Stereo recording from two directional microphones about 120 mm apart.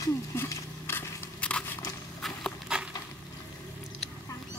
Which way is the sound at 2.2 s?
Centre (ahead or behind).